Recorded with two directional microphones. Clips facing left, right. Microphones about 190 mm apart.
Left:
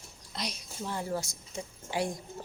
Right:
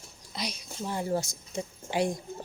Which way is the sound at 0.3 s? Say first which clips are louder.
Right 2 dB; centre (ahead or behind).